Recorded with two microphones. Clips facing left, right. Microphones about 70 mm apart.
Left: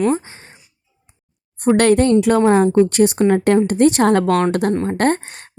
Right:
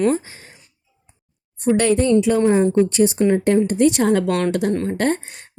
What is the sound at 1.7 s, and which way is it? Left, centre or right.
A woman's voice, left.